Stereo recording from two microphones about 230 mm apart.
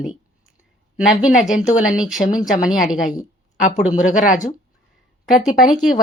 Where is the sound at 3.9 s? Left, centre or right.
Left.